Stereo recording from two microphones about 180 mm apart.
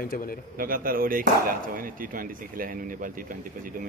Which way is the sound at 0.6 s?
50° right (ahead or behind).